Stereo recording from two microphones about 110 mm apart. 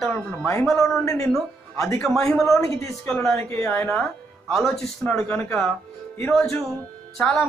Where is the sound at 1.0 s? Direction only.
30° left (ahead or behind).